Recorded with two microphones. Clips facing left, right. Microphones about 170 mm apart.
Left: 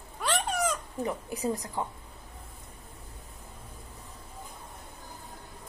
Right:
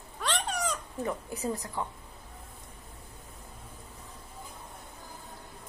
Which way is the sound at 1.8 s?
20° left (ahead or behind).